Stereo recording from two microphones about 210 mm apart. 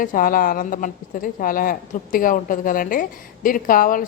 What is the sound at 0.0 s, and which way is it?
Speech, 40° left (ahead or behind).